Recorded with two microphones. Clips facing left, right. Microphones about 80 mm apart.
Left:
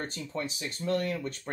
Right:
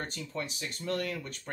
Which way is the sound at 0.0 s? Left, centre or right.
Left.